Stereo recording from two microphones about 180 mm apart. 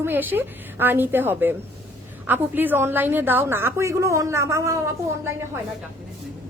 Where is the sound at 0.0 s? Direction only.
10° right (ahead or behind).